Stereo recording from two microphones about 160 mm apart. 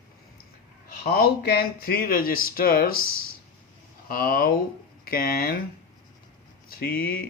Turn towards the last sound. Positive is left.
turn(degrees=65)  # may be behind; listen again after turning